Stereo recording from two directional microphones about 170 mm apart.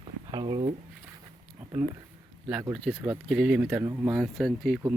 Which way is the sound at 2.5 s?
15° right (ahead or behind).